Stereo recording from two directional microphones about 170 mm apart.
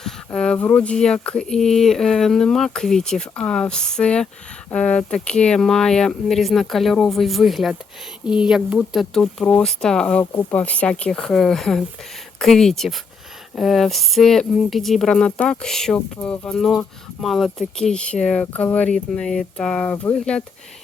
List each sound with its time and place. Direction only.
0.0 s speech: 5° left (ahead or behind)